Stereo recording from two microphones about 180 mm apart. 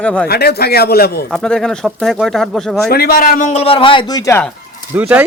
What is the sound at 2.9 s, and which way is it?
Speech, 60° left (ahead or behind).